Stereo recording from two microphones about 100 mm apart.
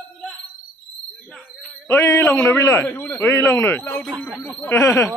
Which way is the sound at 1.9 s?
25° left (ahead or behind).